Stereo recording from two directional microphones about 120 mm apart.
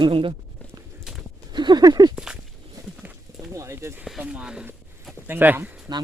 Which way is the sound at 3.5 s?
25° right (ahead or behind).